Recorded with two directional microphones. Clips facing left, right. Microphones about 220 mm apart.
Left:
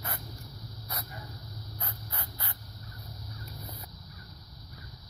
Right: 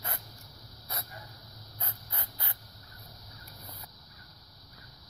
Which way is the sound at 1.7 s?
25° right (ahead or behind).